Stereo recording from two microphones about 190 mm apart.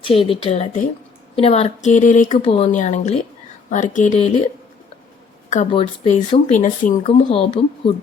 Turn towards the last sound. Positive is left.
turn(degrees=30)  # may be behind; listen again after turning